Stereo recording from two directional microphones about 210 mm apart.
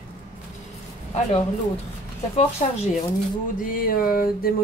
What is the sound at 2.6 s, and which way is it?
Speech, 30° left (ahead or behind).